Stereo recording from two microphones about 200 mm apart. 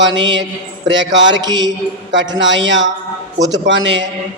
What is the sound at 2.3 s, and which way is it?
A man's voice, 65° right (ahead or behind).